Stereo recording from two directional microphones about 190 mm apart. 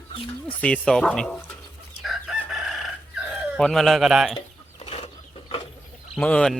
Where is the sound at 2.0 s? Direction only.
Centre (ahead or behind).